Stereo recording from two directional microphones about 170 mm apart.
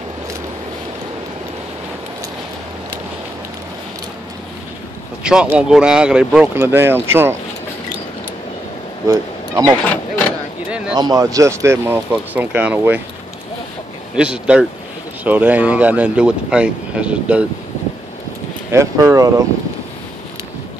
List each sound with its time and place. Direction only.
5.2 s speech: 5° right (ahead or behind)
9.0 s speech: 20° right (ahead or behind)
11.0 s speech: 20° right (ahead or behind)
14.1 s speech: 5° right (ahead or behind)
18.7 s speech: 20° right (ahead or behind)